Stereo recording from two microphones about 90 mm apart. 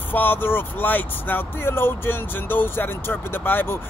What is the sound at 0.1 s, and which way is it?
Speech, 20° left (ahead or behind).